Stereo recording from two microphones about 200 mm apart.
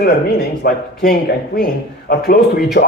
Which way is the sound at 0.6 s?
50° left (ahead or behind).